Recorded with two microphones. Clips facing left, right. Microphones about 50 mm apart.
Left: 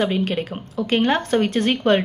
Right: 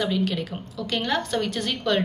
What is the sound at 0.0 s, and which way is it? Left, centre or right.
A woman's voice, left.